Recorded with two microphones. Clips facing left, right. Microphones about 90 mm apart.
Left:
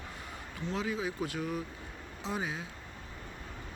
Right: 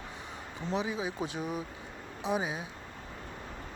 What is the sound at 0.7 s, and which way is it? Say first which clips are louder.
Speech: right 2 dB; 20° right (ahead or behind).